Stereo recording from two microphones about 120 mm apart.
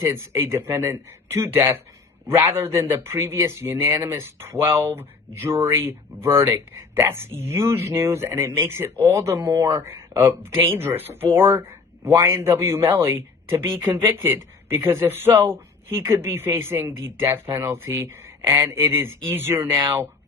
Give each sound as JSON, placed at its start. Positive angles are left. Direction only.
{"t": 0.0, "sound": "speech", "side_deg": -20}